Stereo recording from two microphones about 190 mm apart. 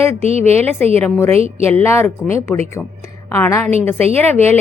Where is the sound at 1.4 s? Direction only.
30° right (ahead or behind).